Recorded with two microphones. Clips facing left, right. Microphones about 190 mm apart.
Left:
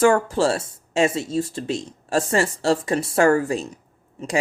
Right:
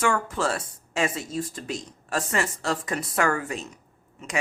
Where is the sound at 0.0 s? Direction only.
35° left (ahead or behind).